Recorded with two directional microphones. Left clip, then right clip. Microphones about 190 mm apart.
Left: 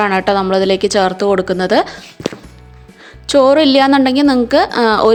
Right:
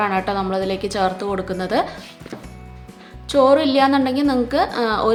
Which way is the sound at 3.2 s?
40° left (ahead or behind).